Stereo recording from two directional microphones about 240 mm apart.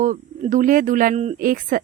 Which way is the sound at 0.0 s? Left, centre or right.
Right.